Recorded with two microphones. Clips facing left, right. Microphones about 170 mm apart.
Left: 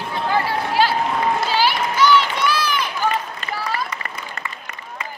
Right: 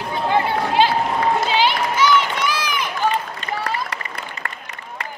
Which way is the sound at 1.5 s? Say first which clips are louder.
Right 1 dB; 20° right (ahead or behind).